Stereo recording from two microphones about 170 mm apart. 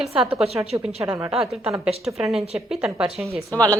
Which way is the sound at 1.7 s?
5° right (ahead or behind).